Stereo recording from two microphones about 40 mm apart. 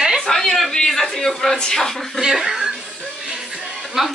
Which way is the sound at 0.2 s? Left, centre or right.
Centre.